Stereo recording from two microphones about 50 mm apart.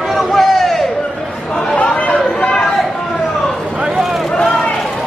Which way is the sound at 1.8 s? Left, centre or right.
Left.